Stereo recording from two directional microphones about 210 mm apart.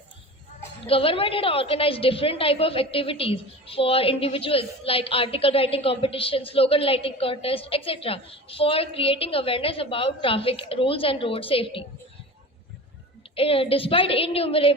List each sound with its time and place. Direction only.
0.9 s a woman's voice: 25° left (ahead or behind)
13.3 s a woman's voice: 25° left (ahead or behind)